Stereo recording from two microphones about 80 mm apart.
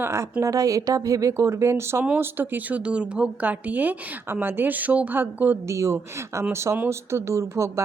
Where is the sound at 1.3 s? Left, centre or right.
Right.